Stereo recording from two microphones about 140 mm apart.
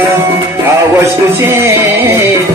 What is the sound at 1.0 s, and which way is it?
Music, 20° right (ahead or behind).